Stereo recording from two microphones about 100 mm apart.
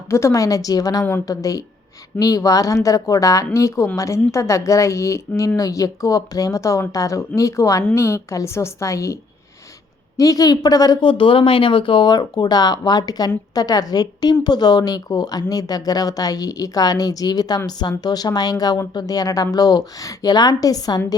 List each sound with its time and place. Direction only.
0.1 s speech: 30° left (ahead or behind)
10.2 s speech: 35° left (ahead or behind)
11.0 s speech: 60° left (ahead or behind); by 21.0 s 40° left (ahead or behind)